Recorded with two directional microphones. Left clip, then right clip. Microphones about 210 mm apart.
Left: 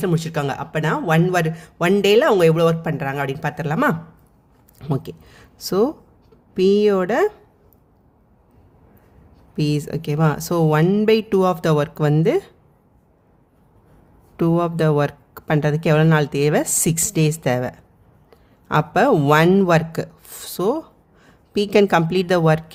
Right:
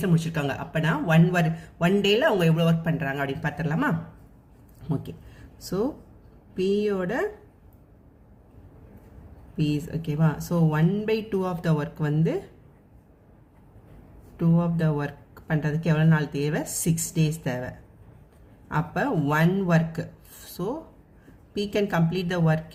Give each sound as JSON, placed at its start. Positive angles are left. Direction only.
{"t": 0.0, "sound": "a man's voice", "side_deg": 45}
{"t": 9.6, "sound": "a man's voice", "side_deg": 50}
{"t": 14.3, "sound": "a man's voice", "side_deg": 50}